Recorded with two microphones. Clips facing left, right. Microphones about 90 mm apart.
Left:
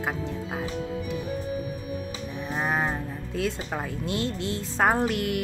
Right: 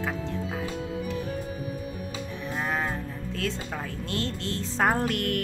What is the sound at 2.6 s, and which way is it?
Music, 20° left (ahead or behind).